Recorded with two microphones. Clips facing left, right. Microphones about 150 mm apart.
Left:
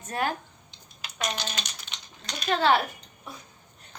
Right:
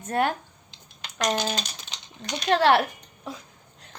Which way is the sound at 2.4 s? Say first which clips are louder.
Right 3 dB; 70° right (ahead or behind).